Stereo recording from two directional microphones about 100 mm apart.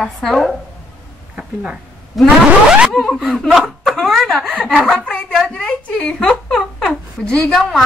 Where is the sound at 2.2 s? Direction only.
10° right (ahead or behind).